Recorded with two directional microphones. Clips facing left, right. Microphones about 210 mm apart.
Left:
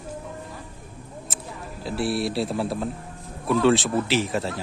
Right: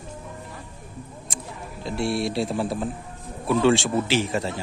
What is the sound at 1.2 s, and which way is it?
A man's voice, 5° left (ahead or behind).